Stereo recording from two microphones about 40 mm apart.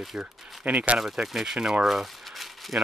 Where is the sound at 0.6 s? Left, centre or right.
Right.